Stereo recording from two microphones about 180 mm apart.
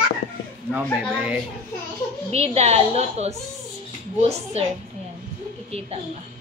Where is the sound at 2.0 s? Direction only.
15° left (ahead or behind).